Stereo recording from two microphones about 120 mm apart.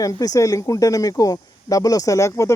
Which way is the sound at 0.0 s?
30° left (ahead or behind).